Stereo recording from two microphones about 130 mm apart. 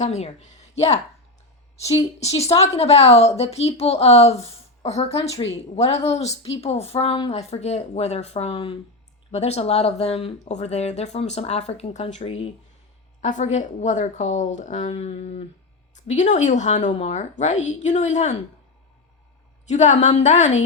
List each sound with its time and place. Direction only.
0.0 s a woman's voice: 55° left (ahead or behind)
2.0 s a woman's voice: 55° left (ahead or behind)
13.2 s speech: 70° left (ahead or behind)
16.0 s speech: 65° left (ahead or behind)
19.6 s speech: 65° left (ahead or behind)